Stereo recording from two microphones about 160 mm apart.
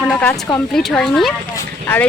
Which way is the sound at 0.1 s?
10° left (ahead or behind).